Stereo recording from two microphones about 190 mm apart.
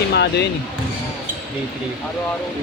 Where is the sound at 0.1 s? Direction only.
60° left (ahead or behind).